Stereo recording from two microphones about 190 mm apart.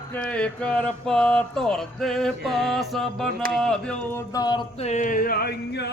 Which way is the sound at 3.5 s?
5° left (ahead or behind).